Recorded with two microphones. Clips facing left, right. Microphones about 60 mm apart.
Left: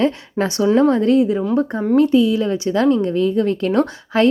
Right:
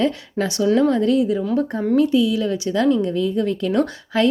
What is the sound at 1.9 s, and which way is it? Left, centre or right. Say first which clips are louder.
Speech: left 3 dB; left.